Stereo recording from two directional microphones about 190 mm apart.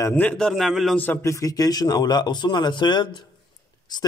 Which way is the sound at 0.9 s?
10° left (ahead or behind).